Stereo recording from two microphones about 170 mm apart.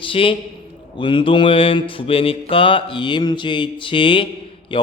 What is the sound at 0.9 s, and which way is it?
Mantra, 30° left (ahead or behind).